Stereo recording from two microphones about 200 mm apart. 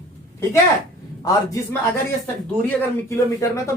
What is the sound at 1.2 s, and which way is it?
Speech, 20° left (ahead or behind).